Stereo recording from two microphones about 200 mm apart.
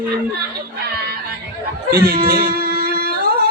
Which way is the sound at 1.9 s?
50° right (ahead or behind).